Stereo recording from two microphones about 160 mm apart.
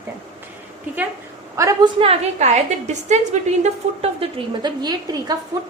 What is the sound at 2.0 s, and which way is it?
A woman's voice, 40° right (ahead or behind).